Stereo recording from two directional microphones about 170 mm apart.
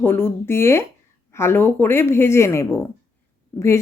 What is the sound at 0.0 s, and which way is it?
Speech, 15° left (ahead or behind).